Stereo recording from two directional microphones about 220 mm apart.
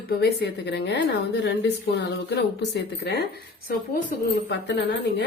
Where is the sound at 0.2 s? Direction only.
50° left (ahead or behind).